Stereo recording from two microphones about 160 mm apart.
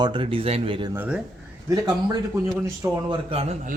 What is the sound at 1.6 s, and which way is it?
A man's voice, 25° right (ahead or behind).